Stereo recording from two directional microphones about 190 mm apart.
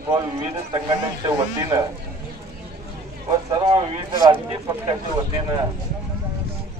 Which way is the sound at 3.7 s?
20° right (ahead or behind).